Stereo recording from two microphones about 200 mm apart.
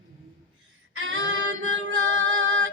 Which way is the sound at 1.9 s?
80° right.